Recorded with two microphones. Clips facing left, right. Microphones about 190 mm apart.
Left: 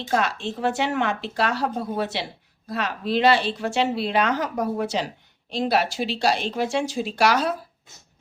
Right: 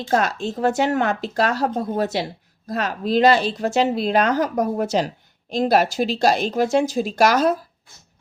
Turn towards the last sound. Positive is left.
turn(degrees=-40)  # may be behind; listen again after turning